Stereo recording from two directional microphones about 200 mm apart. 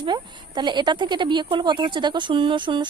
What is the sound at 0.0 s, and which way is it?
Speech, 20° right (ahead or behind).